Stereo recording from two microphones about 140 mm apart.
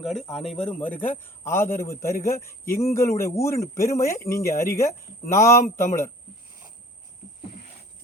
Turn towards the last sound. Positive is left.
turn(degrees=20)  # may be behind; listen again after turning